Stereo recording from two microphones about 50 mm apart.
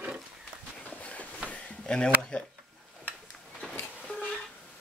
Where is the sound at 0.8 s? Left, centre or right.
Left.